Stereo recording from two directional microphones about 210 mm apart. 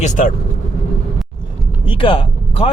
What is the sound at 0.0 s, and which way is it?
Speech, 40° left (ahead or behind).